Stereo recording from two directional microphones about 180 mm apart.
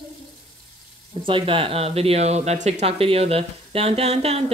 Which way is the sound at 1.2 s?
30° right (ahead or behind).